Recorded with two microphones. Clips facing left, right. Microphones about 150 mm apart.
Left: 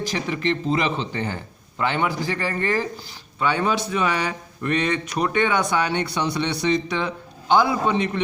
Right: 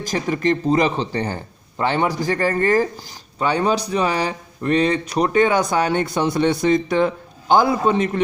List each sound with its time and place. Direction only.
0.0 s speech: 45° right (ahead or behind)